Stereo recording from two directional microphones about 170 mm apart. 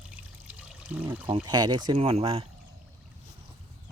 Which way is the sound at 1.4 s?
25° right (ahead or behind).